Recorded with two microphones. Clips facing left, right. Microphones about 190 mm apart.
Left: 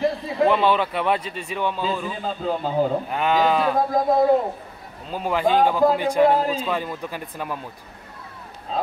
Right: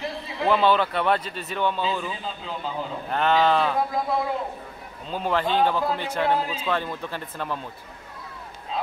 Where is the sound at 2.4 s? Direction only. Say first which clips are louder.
Left 13 dB; 45° left (ahead or behind).